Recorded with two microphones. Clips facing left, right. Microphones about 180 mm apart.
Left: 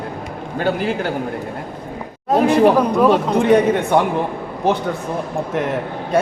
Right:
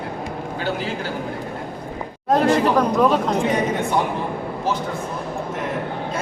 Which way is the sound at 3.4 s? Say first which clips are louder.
Left 7 dB; 60° left (ahead or behind).